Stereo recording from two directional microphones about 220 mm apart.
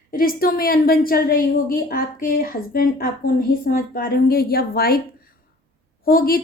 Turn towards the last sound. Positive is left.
turn(degrees=40)  # may be behind; listen again after turning